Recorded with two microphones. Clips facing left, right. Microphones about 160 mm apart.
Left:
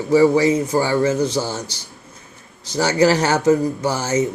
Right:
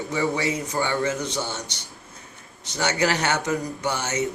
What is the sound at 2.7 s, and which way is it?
A man's voice, 35° left (ahead or behind).